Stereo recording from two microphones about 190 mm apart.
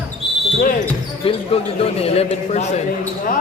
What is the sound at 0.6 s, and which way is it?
Speech, 45° left (ahead or behind).